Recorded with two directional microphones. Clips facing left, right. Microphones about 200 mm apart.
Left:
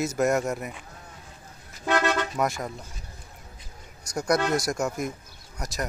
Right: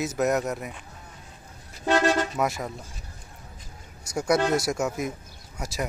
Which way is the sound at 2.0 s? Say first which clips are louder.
Right 3 dB; 35° right (ahead or behind).